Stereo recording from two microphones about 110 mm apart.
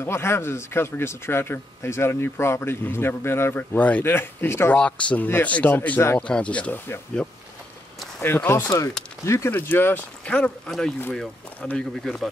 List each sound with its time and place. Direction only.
0.0 s speech: 25° left (ahead or behind)
6.1 s speech: 10° left (ahead or behind)
8.6 s speech: 30° left (ahead or behind); by 12.3 s 5° left (ahead or behind)